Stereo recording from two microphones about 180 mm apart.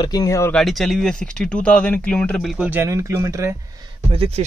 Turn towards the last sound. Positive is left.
turn(degrees=-35)  # may be behind; listen again after turning